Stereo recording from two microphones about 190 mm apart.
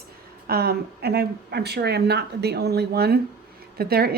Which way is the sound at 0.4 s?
55° right (ahead or behind).